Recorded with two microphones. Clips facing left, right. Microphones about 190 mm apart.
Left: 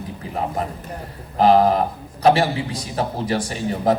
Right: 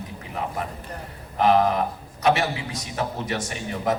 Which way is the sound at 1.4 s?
35° left (ahead or behind).